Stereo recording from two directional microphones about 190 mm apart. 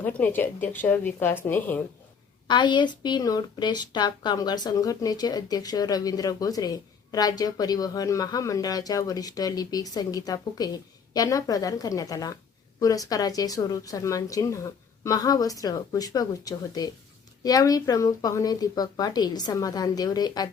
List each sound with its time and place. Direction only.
0.0 s a woman's voice: 10° left (ahead or behind)
2.5 s speech: 25° left (ahead or behind)